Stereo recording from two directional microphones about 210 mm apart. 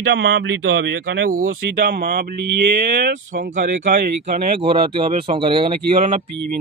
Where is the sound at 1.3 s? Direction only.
40° right (ahead or behind).